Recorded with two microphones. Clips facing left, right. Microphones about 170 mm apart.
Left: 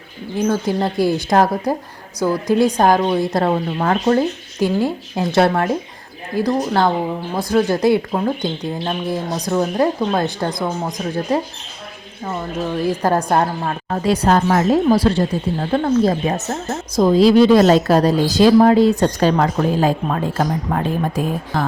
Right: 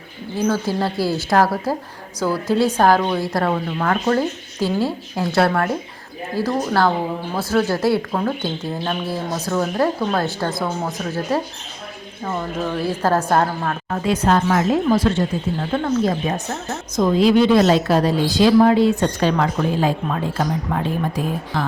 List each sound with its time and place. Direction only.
0.3 s speech: 15° left (ahead or behind)
13.9 s speech: 35° left (ahead or behind)